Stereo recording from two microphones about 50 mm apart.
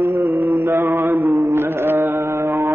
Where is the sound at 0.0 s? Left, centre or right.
Right.